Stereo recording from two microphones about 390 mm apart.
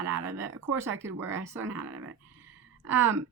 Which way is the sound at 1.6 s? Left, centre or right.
Right.